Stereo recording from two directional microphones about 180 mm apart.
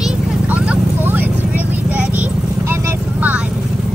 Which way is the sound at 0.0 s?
5° right (ahead or behind).